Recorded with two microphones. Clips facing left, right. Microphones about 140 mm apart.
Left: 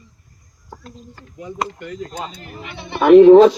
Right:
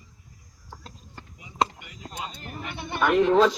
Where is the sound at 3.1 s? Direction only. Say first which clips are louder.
Left 14 dB; 65° left (ahead or behind).